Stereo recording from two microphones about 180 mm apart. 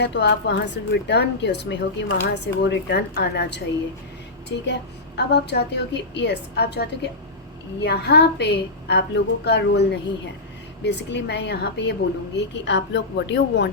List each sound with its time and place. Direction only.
0.0 s a woman's voice: 70° left (ahead or behind)
12.4 s a woman's voice: 80° left